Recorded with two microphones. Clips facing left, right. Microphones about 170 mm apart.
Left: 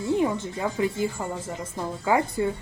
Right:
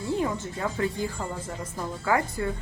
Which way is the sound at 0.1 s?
20° left (ahead or behind).